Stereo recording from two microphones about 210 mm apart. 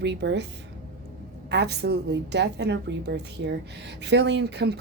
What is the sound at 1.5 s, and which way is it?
A woman's voice, 55° right (ahead or behind).